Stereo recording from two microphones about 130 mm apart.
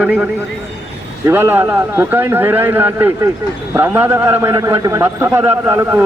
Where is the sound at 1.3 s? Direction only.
15° right (ahead or behind).